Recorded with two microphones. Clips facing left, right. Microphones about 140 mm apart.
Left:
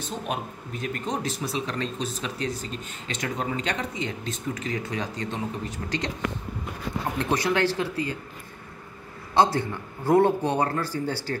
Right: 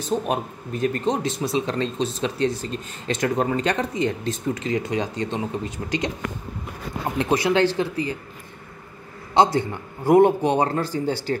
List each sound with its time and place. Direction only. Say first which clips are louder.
0.3 s speech: right 6 dB; 40° right (ahead or behind)
1.0 s speech: right 6 dB; 25° right (ahead or behind); by 4.4 s 45° right (ahead or behind)
4.6 s a man's voice: right 6 dB; 20° right (ahead or behind)
7.2 s speech: right 5 dB; 15° right (ahead or behind)
9.3 s a man's voice: right 3 dB; 15° right (ahead or behind)